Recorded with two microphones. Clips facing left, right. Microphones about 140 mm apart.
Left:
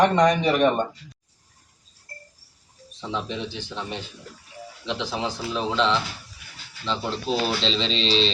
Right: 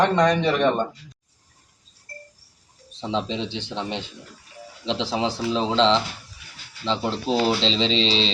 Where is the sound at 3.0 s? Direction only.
20° right (ahead or behind).